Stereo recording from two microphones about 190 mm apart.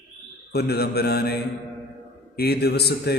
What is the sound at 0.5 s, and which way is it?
Mantra, 55° left (ahead or behind).